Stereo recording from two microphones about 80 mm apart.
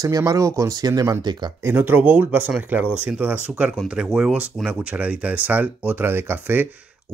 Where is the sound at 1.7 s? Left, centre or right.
Right.